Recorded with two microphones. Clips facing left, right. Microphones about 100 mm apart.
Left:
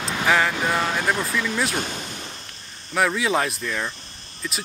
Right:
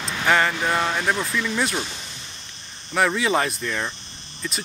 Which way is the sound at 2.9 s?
Centre (ahead or behind).